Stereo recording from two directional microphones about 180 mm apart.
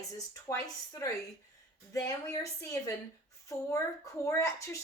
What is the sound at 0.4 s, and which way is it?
Speech, 15° left (ahead or behind).